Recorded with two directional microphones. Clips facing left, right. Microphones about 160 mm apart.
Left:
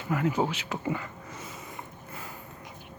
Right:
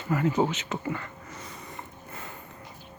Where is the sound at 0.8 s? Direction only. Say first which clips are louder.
Left 5 dB; 10° left (ahead or behind).